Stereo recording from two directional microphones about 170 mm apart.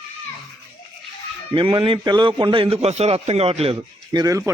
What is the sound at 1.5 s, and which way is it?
A man's voice, 30° right (ahead or behind).